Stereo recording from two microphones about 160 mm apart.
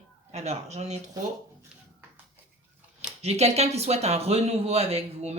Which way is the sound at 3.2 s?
40° right (ahead or behind).